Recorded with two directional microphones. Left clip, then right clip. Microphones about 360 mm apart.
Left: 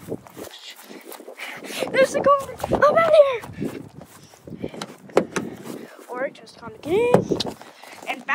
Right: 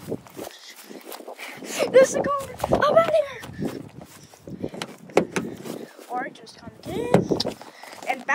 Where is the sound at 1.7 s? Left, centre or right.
Centre.